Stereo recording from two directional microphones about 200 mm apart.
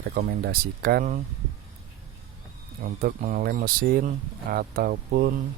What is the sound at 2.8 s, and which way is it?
Speech, 45° right (ahead or behind).